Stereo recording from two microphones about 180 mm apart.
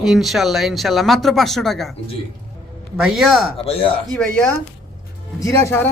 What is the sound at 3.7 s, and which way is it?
Speech, 30° left (ahead or behind).